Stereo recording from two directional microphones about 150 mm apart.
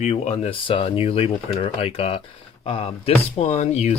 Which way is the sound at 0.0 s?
45° left (ahead or behind).